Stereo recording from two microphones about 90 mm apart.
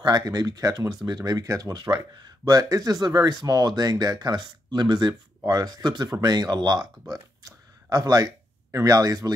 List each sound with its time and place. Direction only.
0.0 s speech: 50° right (ahead or behind)
7.4 s a sound: 40° right (ahead or behind)
8.7 s speech: 40° right (ahead or behind)